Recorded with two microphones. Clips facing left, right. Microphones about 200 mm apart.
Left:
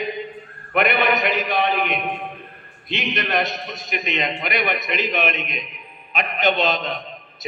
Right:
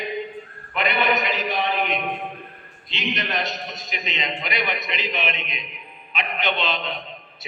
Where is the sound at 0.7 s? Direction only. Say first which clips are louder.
Left 3 dB; 55° left (ahead or behind).